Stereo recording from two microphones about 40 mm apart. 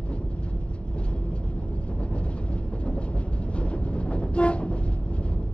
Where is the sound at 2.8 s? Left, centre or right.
Left.